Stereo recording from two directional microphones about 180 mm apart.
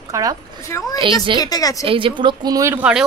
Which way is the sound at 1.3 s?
20° left (ahead or behind).